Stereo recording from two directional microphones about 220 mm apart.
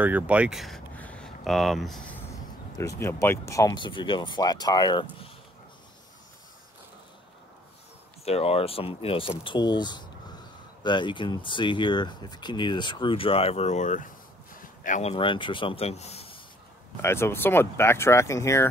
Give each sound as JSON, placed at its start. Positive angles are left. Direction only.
{"t": 0.0, "sound": "speech", "side_deg": -5}
{"t": 2.8, "sound": "speech", "side_deg": 15}
{"t": 8.3, "sound": "speech", "side_deg": 25}
{"t": 17.0, "sound": "speech", "side_deg": 10}